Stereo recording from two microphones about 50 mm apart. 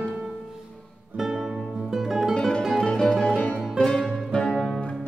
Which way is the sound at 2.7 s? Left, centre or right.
Centre.